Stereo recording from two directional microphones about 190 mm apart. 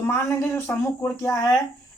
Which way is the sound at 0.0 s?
15° left (ahead or behind).